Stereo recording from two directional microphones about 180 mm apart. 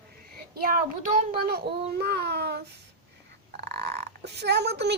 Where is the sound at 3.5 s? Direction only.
65° right (ahead or behind).